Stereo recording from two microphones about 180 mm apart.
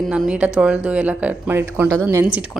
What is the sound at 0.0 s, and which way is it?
A woman's voice, centre (ahead or behind).